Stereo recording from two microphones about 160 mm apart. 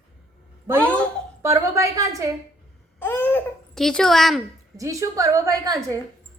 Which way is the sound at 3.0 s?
10° left (ahead or behind).